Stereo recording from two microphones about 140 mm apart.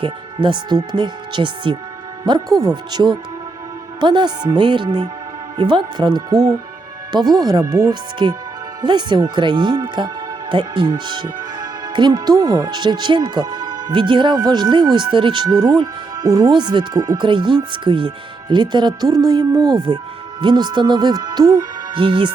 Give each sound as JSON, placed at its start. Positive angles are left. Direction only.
{"t": 0.0, "sound": "speech", "side_deg": -35}
{"t": 21.9, "sound": "speech", "side_deg": -35}